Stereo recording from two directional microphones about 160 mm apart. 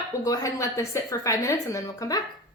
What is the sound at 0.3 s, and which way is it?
A woman's voice, 20° left (ahead or behind).